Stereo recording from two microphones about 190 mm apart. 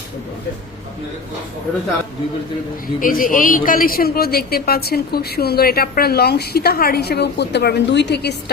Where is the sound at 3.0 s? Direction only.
45° left (ahead or behind).